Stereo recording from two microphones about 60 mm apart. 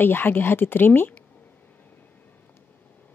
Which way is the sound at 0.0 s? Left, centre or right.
Left.